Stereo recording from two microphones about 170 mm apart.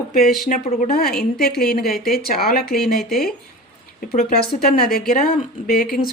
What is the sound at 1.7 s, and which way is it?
Speech, 60° left (ahead or behind).